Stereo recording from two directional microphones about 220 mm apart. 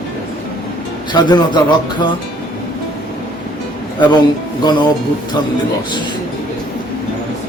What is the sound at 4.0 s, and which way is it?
Speech, 20° left (ahead or behind).